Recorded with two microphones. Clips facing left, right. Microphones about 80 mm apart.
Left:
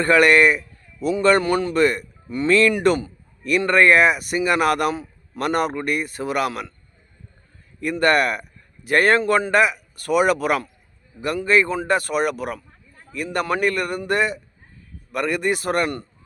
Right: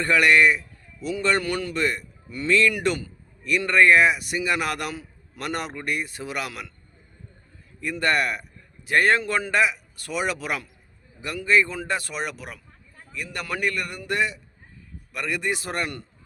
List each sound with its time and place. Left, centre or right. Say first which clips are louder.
0.0 s a man's voice: left 4 dB; left
1.4 s a man's voice: left 7 dB; left
1.7 s a man's voice: left 7 dB; left
7.8 s a man's voice: left 5 dB; left